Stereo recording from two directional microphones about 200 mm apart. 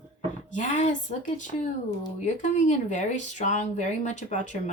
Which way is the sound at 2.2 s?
40° left (ahead or behind).